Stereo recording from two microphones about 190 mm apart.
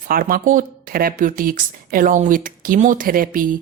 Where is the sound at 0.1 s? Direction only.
50° right (ahead or behind).